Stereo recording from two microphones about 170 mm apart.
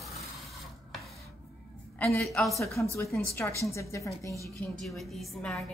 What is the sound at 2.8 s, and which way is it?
A woman's voice, 10° left (ahead or behind).